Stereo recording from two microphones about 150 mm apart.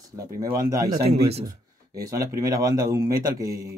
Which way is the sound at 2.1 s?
25° right (ahead or behind).